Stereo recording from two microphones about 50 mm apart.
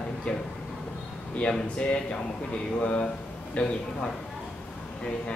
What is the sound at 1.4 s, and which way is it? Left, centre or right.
A man's voice, centre.